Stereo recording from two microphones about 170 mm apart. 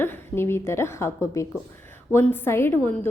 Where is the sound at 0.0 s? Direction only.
15° left (ahead or behind).